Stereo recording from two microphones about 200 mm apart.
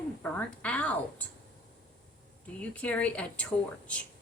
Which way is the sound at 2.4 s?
5° left (ahead or behind).